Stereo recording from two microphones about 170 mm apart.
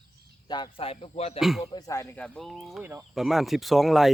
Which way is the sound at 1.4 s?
Centre (ahead or behind).